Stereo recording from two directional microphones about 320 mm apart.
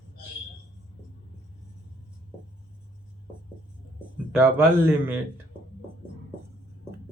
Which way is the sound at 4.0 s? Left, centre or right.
Centre.